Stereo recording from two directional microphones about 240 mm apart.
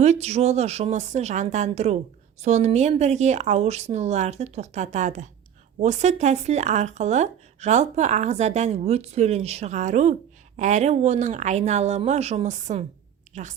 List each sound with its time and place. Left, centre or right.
0.0 s speech: right